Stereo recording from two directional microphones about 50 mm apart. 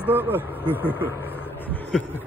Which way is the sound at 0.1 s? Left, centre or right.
Right.